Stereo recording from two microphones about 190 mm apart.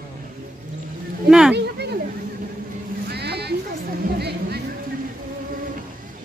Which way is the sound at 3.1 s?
60° right (ahead or behind).